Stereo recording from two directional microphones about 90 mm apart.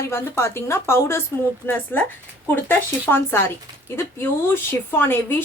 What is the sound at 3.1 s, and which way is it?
Speech, 25° left (ahead or behind).